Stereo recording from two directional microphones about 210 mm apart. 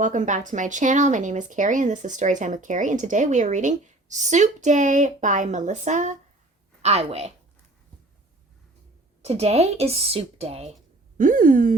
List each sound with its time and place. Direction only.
0.0 s speech: 35° right (ahead or behind)
9.2 s speech: 30° right (ahead or behind)
11.2 s speech: 40° right (ahead or behind)